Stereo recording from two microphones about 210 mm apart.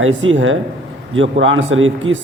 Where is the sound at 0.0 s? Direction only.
65° right (ahead or behind).